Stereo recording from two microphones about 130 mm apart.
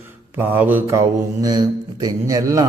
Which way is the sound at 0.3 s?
15° right (ahead or behind).